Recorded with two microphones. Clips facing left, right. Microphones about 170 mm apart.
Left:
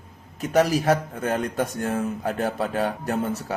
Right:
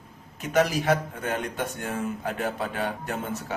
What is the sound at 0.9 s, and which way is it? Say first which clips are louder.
Speech: left 3 dB; 40° left (ahead or behind).